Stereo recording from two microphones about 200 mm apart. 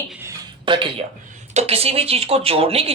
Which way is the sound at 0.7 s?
25° right (ahead or behind).